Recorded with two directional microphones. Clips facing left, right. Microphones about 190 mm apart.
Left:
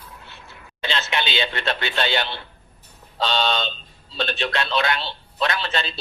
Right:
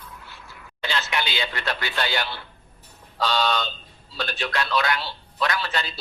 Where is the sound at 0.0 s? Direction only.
25° left (ahead or behind).